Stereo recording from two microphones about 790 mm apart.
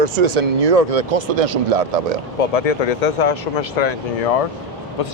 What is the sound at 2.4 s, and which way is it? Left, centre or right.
Speech, left.